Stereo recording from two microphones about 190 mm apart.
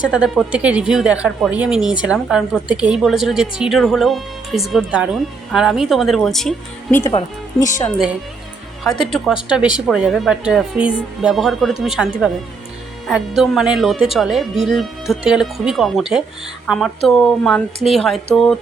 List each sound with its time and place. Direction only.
0.1 s speech: 5° right (ahead or behind)
7.6 s speech: 15° left (ahead or behind)
8.8 s speech: centre (ahead or behind)